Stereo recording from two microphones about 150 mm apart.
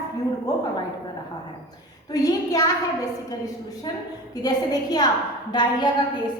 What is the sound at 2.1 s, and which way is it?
Speech, 25° left (ahead or behind).